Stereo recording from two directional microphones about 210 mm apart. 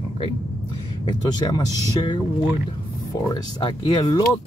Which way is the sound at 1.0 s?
20° left (ahead or behind).